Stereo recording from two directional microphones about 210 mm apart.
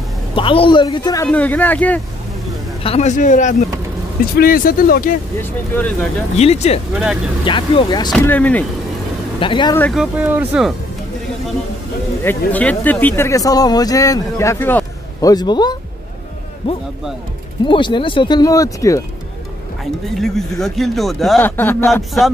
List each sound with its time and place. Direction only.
0.4 s speech: 25° left (ahead or behind); by 2.0 s 5° left (ahead or behind)
2.8 s a man's voice: 30° left (ahead or behind)
5.4 s speech: 5° left (ahead or behind)
6.3 s speech: 30° left (ahead or behind)
6.9 s speech: 5° right (ahead or behind)
7.4 s speech: 25° left (ahead or behind)
8.1 s speech: 5° left (ahead or behind)
9.4 s speech: 25° left (ahead or behind)
9.8 s speech: 5° left (ahead or behind)
10.1 s speech: 10° right (ahead or behind)
12.2 s speech: 10° left (ahead or behind)
19.8 s speech: centre (ahead or behind)